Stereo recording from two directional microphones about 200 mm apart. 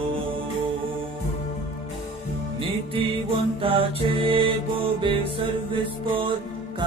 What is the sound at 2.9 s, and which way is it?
Music, 25° right (ahead or behind).